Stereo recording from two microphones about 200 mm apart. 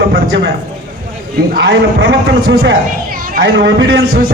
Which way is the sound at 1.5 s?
60° right (ahead or behind).